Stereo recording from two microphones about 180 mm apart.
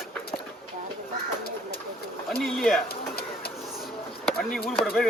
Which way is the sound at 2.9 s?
60° left (ahead or behind).